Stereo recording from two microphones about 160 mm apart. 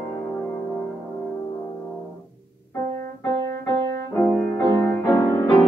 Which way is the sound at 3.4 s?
90° right.